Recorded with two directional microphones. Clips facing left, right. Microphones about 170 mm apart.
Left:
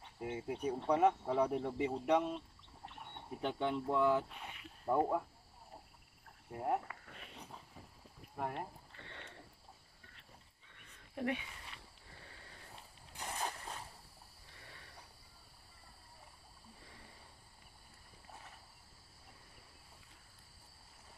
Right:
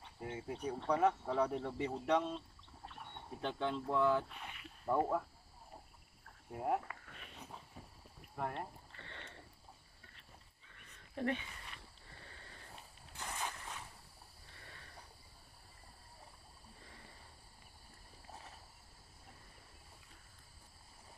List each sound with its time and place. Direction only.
0.2 s speech: 15° left (ahead or behind)
6.5 s speech: 5° right (ahead or behind)
8.4 s speech: 5° left (ahead or behind)
11.1 s speech: 10° left (ahead or behind)
13.4 s zipper: 35° left (ahead or behind)